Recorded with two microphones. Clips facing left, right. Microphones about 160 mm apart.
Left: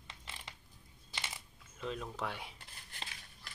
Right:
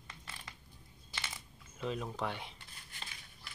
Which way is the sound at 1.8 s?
5° right (ahead or behind).